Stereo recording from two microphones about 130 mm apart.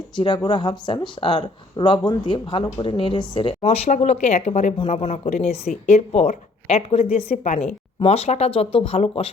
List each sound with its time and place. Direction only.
0.4 s speech: 35° left (ahead or behind)